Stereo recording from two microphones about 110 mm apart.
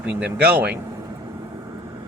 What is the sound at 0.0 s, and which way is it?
Speech, 10° right (ahead or behind).